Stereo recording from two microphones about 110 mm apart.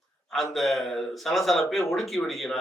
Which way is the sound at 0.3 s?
Centre (ahead or behind).